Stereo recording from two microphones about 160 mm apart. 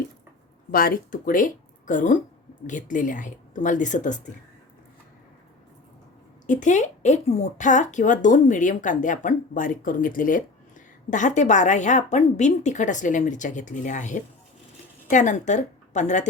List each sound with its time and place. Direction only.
0.7 s speech: 65° left (ahead or behind)
6.5 s a woman's voice: 50° left (ahead or behind)